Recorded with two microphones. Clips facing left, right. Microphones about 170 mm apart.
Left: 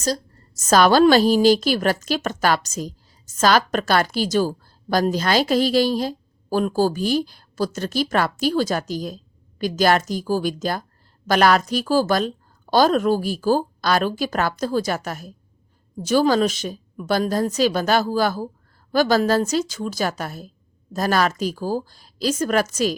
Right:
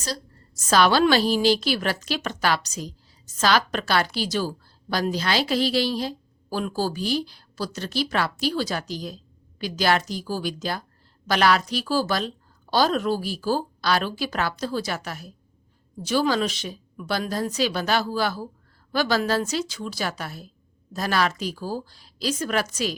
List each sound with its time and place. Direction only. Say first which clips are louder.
0.6 s a woman's voice: left 5 dB; 45° left (ahead or behind)